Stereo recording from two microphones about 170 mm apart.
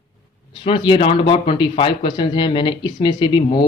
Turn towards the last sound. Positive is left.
turn(degrees=25)  # may be behind; listen again after turning